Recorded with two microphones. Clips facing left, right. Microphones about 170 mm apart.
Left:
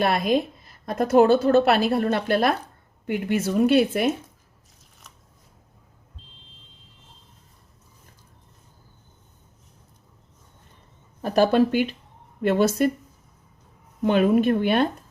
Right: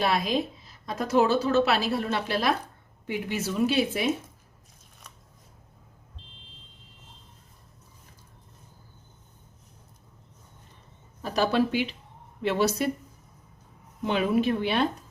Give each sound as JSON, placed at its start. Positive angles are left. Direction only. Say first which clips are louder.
{"t": 0.0, "sound": "a woman's voice", "louder": "left 4 dB", "side_deg": 55}
{"t": 11.2, "sound": "a woman's voice", "louder": "left 6 dB", "side_deg": 50}
{"t": 14.0, "sound": "a woman's voice", "louder": "left 6 dB", "side_deg": 50}